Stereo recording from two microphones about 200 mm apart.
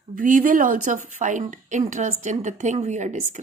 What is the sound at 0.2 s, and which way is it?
Speech, 40° right (ahead or behind).